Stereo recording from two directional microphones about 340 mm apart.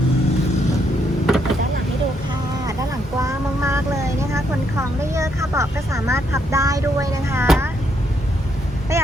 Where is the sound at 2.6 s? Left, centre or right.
Centre.